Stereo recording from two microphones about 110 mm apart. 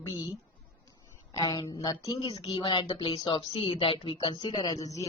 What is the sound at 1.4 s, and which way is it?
Speech, 35° left (ahead or behind).